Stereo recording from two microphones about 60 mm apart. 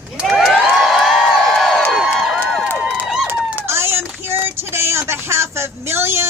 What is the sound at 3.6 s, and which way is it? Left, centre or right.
Speech, right.